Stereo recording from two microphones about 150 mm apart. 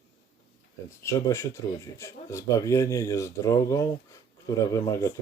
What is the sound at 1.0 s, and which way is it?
Speech, 20° left (ahead or behind).